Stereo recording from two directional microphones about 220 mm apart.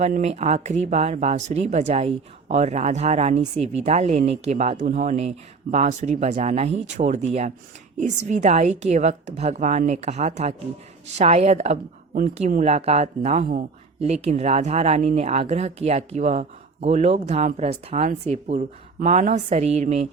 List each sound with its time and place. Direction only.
0.0 s a woman's voice: 30° right (ahead or behind)